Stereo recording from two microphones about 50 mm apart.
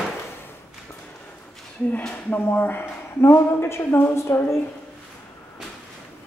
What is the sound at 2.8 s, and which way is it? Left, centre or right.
A woman's voice, left.